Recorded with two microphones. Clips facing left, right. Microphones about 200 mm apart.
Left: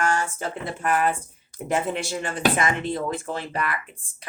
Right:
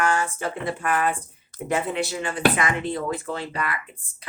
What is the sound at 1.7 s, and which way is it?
Speech, 45° left (ahead or behind).